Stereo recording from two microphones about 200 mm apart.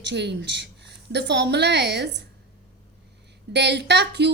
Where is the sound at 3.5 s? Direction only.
60° right (ahead or behind).